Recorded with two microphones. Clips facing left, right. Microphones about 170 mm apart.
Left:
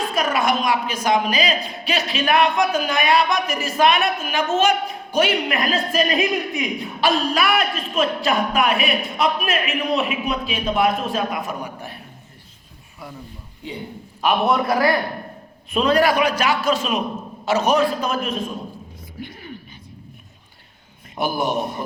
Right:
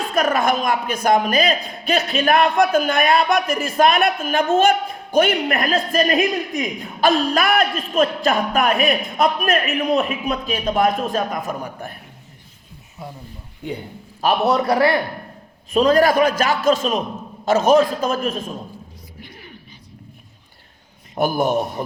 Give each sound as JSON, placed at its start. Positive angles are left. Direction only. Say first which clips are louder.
{"t": 0.2, "sound": "a woman's voice", "louder": "right 3 dB", "side_deg": -50}
{"t": 14.2, "sound": "a man's voice", "louder": "right 1 dB", "side_deg": -35}
{"t": 15.7, "sound": "a woman's voice", "louder": "right 3 dB", "side_deg": -40}
{"t": 21.2, "sound": "a woman's voice", "louder": "right 3 dB", "side_deg": -45}